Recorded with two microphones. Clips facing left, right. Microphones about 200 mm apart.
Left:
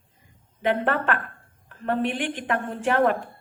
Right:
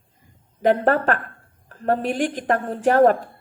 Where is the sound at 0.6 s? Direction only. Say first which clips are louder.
Right 6 dB; 40° right (ahead or behind).